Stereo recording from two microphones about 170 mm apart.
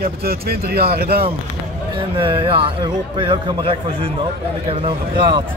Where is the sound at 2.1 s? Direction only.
30° right (ahead or behind).